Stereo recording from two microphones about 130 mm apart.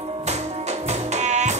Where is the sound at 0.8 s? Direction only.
60° right (ahead or behind).